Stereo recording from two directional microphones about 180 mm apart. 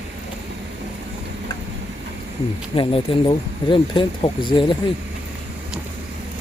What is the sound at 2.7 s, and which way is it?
Speech, 30° left (ahead or behind).